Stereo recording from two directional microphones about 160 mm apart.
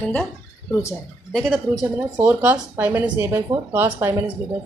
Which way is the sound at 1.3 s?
Centre (ahead or behind).